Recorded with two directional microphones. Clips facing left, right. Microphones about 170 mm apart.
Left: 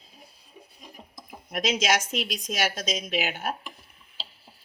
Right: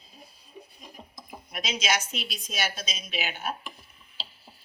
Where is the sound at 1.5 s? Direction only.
90° left.